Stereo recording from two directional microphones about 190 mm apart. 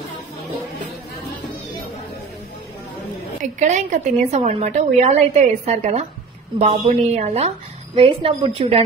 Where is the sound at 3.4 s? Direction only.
40° right (ahead or behind).